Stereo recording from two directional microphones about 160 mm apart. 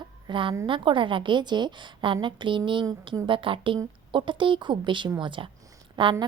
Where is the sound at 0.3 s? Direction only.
30° right (ahead or behind).